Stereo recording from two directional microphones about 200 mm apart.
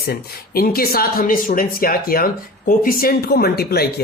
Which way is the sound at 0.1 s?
50° left (ahead or behind).